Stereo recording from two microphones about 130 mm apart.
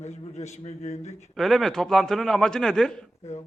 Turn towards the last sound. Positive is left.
turn(degrees=55)  # may be behind; listen again after turning